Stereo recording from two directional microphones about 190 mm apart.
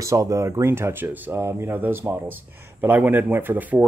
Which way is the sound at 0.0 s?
15° right (ahead or behind).